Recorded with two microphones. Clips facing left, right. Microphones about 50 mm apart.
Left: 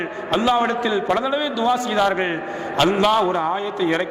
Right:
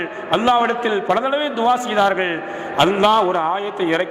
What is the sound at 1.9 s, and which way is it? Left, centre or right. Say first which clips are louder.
A man's voice: right 2 dB; centre.